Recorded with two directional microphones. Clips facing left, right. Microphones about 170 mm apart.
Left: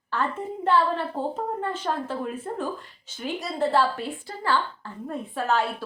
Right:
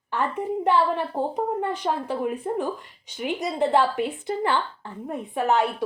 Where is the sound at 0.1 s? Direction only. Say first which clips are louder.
Right 3 dB; 15° right (ahead or behind).